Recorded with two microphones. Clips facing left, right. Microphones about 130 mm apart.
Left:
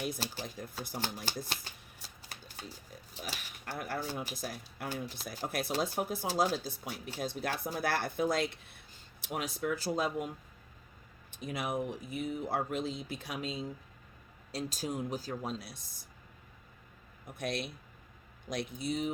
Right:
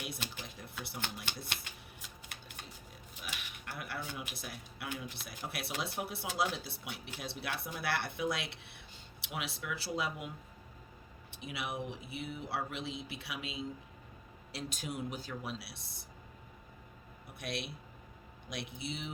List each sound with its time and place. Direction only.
0.0 s speech: 40° left (ahead or behind)
2.0 s typewriter: 35° left (ahead or behind)
3.2 s speech: 35° left (ahead or behind)
17.3 s speech: 50° left (ahead or behind)